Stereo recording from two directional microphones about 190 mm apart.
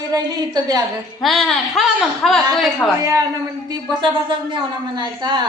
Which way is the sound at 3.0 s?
15° right (ahead or behind).